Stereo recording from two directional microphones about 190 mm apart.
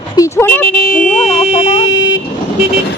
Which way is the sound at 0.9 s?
45° left (ahead or behind).